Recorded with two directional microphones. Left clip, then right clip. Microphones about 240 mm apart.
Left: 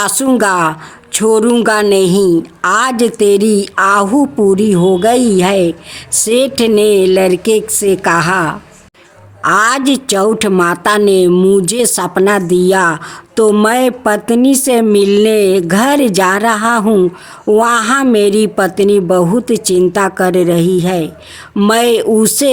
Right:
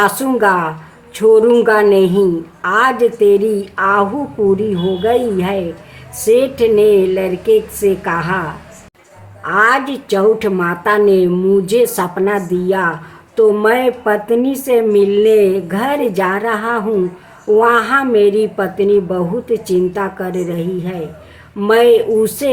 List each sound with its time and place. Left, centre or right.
0.0 s a woman's voice: left